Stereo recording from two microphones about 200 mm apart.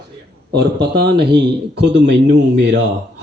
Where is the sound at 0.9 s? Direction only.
55° right (ahead or behind).